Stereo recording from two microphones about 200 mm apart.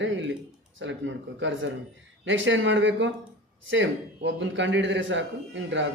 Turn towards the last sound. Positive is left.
turn(degrees=-65)  # may be behind; listen again after turning